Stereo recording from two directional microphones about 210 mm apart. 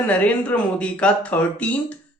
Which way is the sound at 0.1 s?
5° left (ahead or behind).